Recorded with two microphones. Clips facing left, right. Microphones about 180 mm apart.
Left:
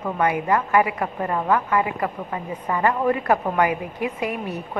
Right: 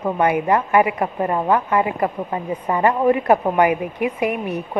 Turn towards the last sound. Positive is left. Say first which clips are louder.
# right 5 dB
turn(degrees=-20)  # may be behind; listen again after turning